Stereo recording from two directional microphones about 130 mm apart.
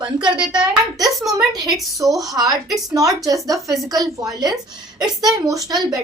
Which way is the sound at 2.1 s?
25° right (ahead or behind).